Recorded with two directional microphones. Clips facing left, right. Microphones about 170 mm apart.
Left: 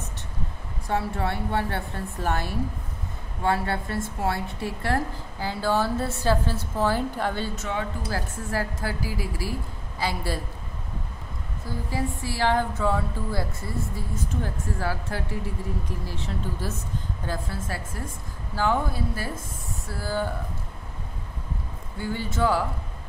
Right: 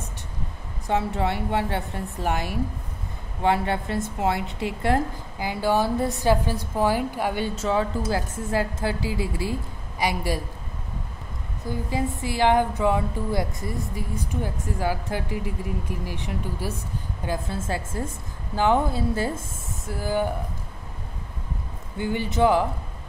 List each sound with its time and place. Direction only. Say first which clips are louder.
0.8 s a woman's voice: right 3 dB; 20° right (ahead or behind)
7.5 s speech: right 6 dB; 30° right (ahead or behind)
8.1 s a woman's voice: right 4 dB; 20° right (ahead or behind)
11.9 s a woman's voice: right 2 dB; 20° right (ahead or behind)
17.3 s a woman's voice: right 4 dB; 25° right (ahead or behind)
21.9 s a woman's voice: right 4 dB; 20° right (ahead or behind)